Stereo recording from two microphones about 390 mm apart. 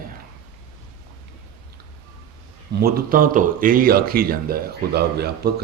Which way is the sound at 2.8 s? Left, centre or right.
Right.